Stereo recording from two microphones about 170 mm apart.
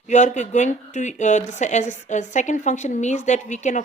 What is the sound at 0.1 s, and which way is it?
Speech, 45° left (ahead or behind).